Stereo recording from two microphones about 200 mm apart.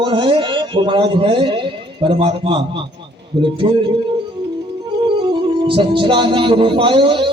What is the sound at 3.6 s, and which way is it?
Speech, 25° right (ahead or behind).